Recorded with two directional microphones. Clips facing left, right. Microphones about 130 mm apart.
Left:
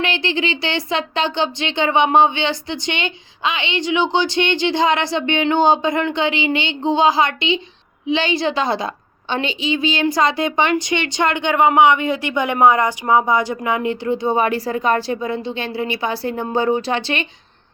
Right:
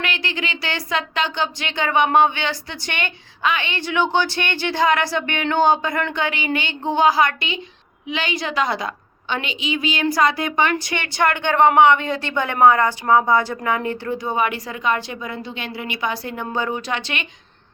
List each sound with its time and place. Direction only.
0.0 s a woman's voice: 25° left (ahead or behind)